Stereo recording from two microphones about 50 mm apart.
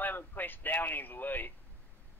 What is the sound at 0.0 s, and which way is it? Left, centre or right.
Speech, left.